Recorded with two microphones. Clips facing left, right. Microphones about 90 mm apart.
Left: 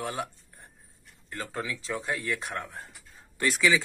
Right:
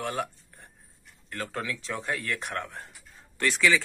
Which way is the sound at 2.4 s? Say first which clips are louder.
Right 1 dB; 5° left (ahead or behind).